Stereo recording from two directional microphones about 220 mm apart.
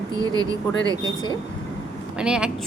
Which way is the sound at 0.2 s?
20° right (ahead or behind).